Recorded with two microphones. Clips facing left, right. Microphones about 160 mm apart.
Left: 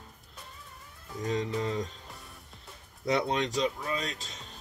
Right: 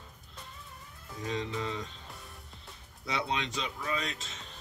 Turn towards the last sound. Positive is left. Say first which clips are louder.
# left 1 dB
turn(degrees=35)  # may be behind; listen again after turning